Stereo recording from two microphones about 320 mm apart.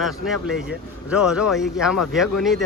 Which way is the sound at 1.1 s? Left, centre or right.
Centre.